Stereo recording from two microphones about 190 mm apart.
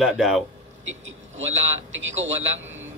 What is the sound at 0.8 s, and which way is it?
Vehicle, 90° right.